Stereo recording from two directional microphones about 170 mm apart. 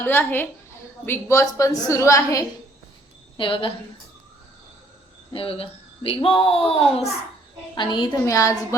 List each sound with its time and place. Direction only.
0.0 s a woman's voice: 10° left (ahead or behind)
3.3 s speech: 30° left (ahead or behind)
5.3 s speech: 35° left (ahead or behind)
7.8 s a woman's voice: 25° left (ahead or behind)